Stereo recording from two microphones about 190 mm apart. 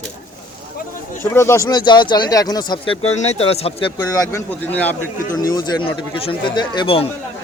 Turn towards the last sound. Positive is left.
turn(degrees=25)  # may be behind; listen again after turning